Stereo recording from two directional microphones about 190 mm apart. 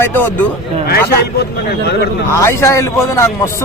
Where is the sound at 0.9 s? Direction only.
55° left (ahead or behind).